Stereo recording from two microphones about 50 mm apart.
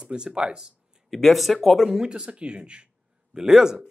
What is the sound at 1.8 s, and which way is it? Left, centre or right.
Speech, centre.